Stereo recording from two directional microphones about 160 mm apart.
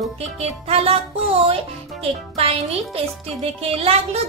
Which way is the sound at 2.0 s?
35° right (ahead or behind).